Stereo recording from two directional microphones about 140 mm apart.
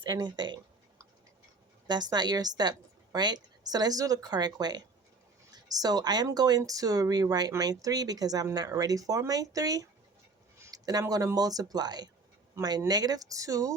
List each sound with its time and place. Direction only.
0.0 s speech: 30° right (ahead or behind)
1.9 s speech: 30° right (ahead or behind)